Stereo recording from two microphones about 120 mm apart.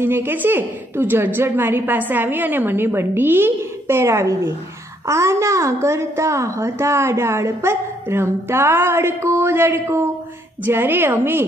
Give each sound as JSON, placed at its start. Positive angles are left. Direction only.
{"t": 0.0, "sound": "a woman's voice", "side_deg": -20}